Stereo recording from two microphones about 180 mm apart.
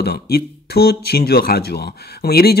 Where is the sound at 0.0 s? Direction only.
60° left (ahead or behind).